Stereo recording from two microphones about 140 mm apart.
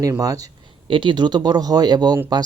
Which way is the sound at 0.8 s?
35° right (ahead or behind).